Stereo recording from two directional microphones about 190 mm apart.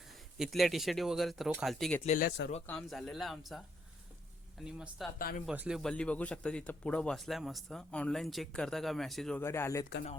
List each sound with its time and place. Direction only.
0.3 s speech: centre (ahead or behind)
2.0 s speech: 45° left (ahead or behind)
2.6 s speech: centre (ahead or behind)
4.6 s speech: 5° right (ahead or behind)
9.4 s speech: 15° left (ahead or behind)